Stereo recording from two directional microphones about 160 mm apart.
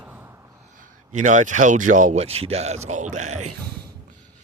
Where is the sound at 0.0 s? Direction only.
10° right (ahead or behind).